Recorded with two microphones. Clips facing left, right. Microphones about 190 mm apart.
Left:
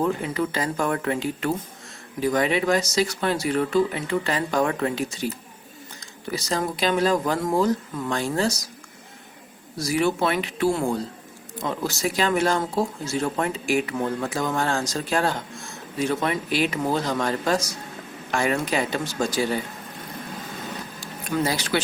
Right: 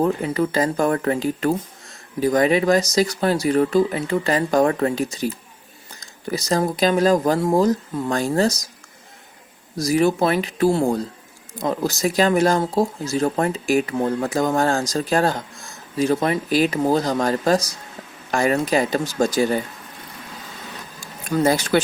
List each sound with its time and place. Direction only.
0.0 s speech: 40° right (ahead or behind)
9.7 s speech: 40° right (ahead or behind)
21.4 s speech: 50° right (ahead or behind)